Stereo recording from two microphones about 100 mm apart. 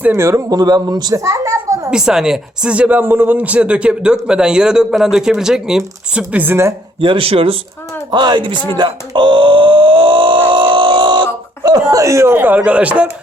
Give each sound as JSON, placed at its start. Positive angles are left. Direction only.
{"t": 0.0, "sound": "speech", "side_deg": -20}
{"t": 0.3, "sound": "a child's voice", "side_deg": -35}
{"t": 1.9, "sound": "speech", "side_deg": -5}
{"t": 7.0, "sound": "speech", "side_deg": -60}
{"t": 8.1, "sound": "speech", "side_deg": -50}